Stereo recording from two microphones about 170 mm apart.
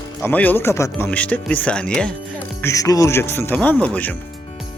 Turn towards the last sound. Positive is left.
turn(degrees=10)  # may be behind; listen again after turning